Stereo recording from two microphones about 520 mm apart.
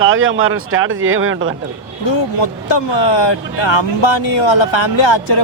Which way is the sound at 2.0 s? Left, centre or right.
Left.